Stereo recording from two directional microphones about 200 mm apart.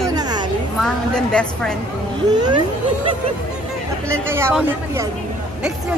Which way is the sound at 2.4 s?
20° right (ahead or behind).